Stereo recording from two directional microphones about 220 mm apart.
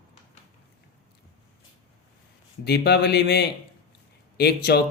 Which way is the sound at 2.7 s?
50° left (ahead or behind).